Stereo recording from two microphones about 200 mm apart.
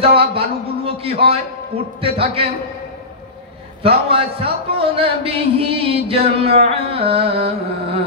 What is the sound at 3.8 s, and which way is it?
A man's voice, 30° right (ahead or behind).